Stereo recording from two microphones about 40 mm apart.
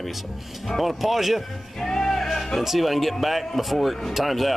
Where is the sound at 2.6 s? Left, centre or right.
Centre.